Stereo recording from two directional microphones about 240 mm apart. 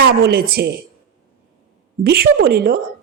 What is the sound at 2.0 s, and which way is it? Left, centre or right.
Speech, right.